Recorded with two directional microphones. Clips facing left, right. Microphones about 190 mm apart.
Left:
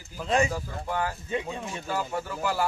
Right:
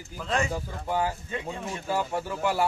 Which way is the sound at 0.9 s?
10° right (ahead or behind).